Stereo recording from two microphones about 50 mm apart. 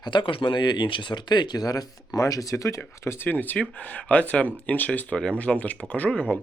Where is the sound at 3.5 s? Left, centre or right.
Left.